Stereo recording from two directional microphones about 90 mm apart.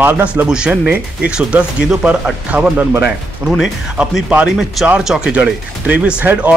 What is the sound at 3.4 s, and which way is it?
Speech, 5° right (ahead or behind).